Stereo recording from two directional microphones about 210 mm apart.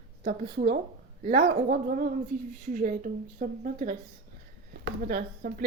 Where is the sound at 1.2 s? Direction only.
35° right (ahead or behind).